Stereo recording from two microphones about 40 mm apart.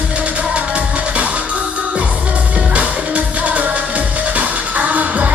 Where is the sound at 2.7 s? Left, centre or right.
Right.